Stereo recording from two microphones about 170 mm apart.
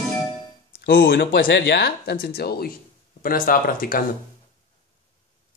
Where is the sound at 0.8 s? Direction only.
70° left (ahead or behind).